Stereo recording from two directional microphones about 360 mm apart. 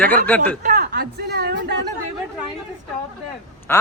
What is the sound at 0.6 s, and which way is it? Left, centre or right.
Speech, right.